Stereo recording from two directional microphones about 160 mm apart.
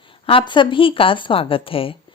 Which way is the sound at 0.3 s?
30° left (ahead or behind).